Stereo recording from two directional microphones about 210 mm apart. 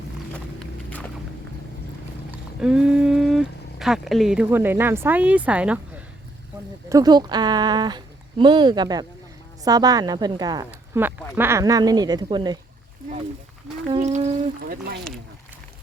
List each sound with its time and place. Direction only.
0.3 s a sound: 5° left (ahead or behind)
2.6 s speech: 5° right (ahead or behind)
6.8 s speech: 15° right (ahead or behind)
13.8 s speech: 30° right (ahead or behind)
14.6 s speech: 50° right (ahead or behind)